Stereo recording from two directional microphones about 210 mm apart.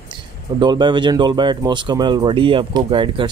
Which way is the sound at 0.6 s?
20° right (ahead or behind).